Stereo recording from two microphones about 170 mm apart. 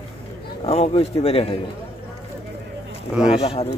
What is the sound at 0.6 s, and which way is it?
Speech, 35° left (ahead or behind).